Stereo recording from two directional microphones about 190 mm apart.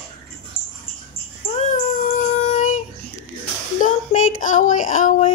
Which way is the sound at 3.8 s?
45° left (ahead or behind).